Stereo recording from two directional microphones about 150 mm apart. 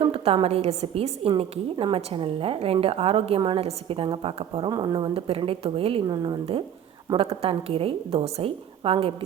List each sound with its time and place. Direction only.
0.0 s a woman's voice: 35° right (ahead or behind)
4.7 s a woman's voice: 30° right (ahead or behind)